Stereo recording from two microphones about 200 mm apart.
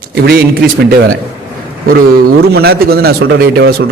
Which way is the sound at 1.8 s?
50° right (ahead or behind).